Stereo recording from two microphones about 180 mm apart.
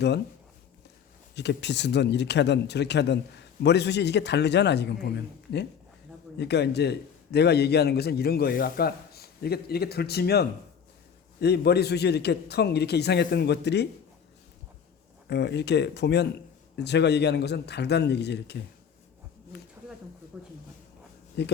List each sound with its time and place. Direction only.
1.4 s a man's voice: 70° left (ahead or behind)
15.3 s a man's voice: 70° left (ahead or behind)
21.4 s a man's voice: 70° left (ahead or behind)